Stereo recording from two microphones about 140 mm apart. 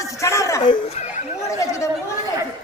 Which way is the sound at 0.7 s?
50° left (ahead or behind).